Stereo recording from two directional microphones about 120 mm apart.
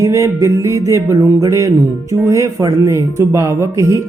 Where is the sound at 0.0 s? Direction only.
25° right (ahead or behind).